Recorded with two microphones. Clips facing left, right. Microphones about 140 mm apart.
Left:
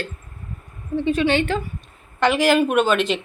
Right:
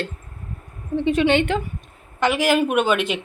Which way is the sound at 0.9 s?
20° right (ahead or behind).